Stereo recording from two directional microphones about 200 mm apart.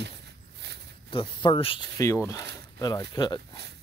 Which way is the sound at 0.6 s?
55° right (ahead or behind).